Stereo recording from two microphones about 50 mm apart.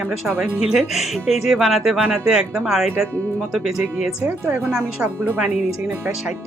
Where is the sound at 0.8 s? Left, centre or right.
Centre.